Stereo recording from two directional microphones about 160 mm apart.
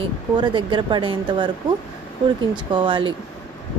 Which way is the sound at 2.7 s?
30° right (ahead or behind).